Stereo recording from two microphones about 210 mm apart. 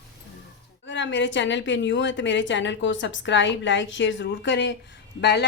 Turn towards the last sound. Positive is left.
turn(degrees=55)  # may be behind; listen again after turning